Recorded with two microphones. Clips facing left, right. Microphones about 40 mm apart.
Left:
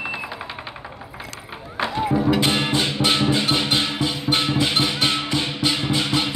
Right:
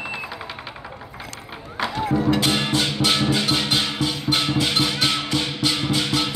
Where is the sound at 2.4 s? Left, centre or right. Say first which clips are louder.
Left 1 dB; left.